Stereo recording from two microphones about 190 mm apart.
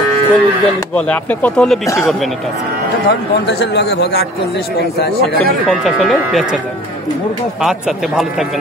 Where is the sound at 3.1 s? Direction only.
60° left (ahead or behind).